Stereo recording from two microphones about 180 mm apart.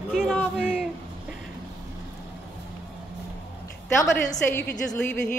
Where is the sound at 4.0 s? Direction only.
20° left (ahead or behind).